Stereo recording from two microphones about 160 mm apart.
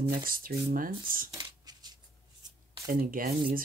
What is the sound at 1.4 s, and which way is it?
Shuffling cards, 25° right (ahead or behind).